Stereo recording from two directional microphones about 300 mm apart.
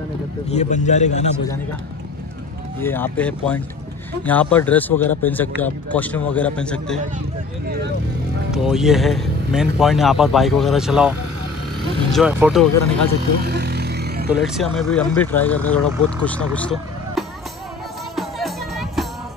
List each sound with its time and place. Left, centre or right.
0.5 s a man's voice: left
2.8 s speech: centre
8.6 s speech: centre
13.4 s vehicle: right
14.3 s speech: centre
18.1 s music: centre